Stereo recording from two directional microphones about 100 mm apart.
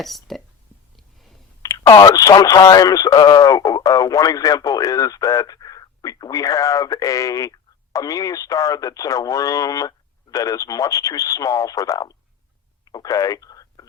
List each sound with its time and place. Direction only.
0.0 s speech: centre (ahead or behind)
1.6 s speech: 35° left (ahead or behind)
12.8 s telephone dialing: 40° left (ahead or behind)